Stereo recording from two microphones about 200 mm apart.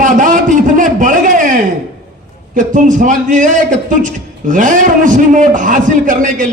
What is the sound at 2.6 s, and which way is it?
A man's voice, 40° right (ahead or behind).